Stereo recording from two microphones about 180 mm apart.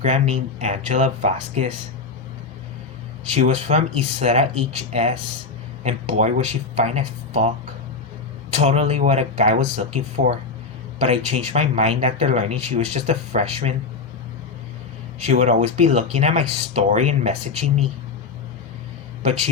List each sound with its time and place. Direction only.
0.0 s speech: 40° right (ahead or behind)
3.3 s speech: 40° right (ahead or behind)
8.5 s speech: 35° right (ahead or behind)
15.2 s speech: 40° right (ahead or behind)
19.2 s a man's voice: 40° right (ahead or behind)